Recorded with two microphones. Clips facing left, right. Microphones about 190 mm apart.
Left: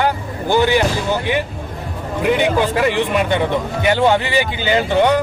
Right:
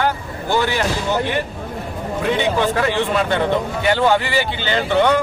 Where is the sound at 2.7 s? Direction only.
15° left (ahead or behind).